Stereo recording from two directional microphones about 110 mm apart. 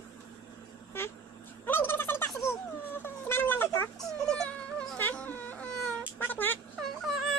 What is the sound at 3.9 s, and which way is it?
Dog, 5° left (ahead or behind).